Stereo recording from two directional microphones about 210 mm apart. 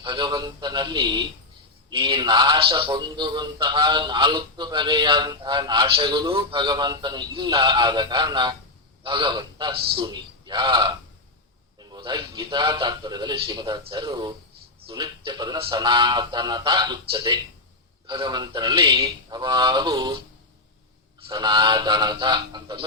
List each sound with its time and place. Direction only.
0.0 s a man's voice: 20° right (ahead or behind)
9.7 s a man's voice: 50° right (ahead or behind)
10.0 s a man's voice: 20° right (ahead or behind)
21.2 s a man's voice: 20° right (ahead or behind)